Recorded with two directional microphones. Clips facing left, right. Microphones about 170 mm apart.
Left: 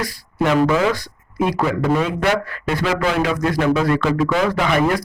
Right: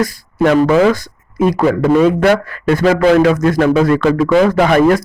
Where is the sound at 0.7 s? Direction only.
45° right (ahead or behind).